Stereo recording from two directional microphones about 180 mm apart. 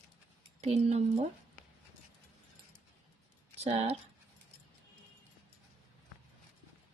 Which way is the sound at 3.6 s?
35° right (ahead or behind).